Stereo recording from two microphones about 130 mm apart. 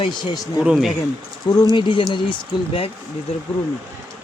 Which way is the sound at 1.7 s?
40° left (ahead or behind).